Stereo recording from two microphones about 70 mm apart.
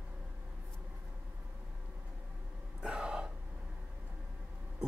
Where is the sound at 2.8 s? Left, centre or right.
Centre.